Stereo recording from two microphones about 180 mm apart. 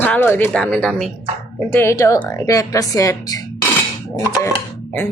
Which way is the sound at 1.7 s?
15° left (ahead or behind).